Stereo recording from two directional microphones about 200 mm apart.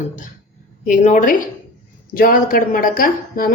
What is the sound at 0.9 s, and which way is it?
A woman's voice, 40° left (ahead or behind).